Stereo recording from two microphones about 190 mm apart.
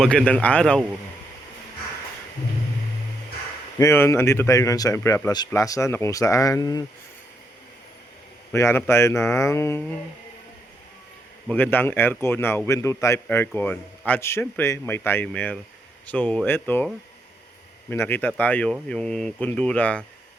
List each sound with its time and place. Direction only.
0.0 s a man's voice: 5° left (ahead or behind)
3.8 s speech: 15° left (ahead or behind)
8.5 s speech: 15° left (ahead or behind)
11.4 s speech: 10° left (ahead or behind)